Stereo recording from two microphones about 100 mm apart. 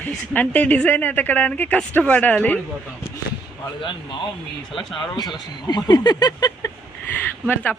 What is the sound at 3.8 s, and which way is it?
Speech, 55° left (ahead or behind).